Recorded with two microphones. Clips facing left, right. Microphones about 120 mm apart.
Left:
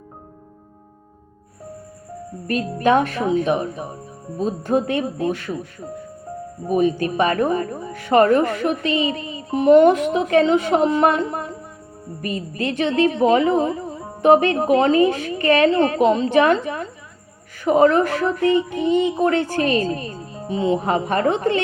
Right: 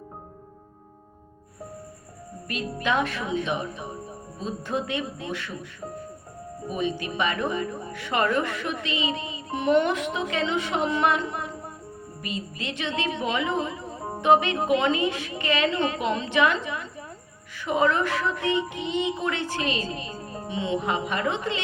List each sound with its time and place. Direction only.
2.5 s a woman's voice: 45° left (ahead or behind)
3.1 s a woman's voice: 35° left (ahead or behind)
6.7 s a woman's voice: 45° left (ahead or behind)
9.0 s music: 25° right (ahead or behind)
9.5 s a woman's voice: 35° left (ahead or behind)
12.7 s a woman's voice: 40° left (ahead or behind)
18.3 s music: 25° right (ahead or behind)
18.7 s a woman's voice: 45° left (ahead or behind)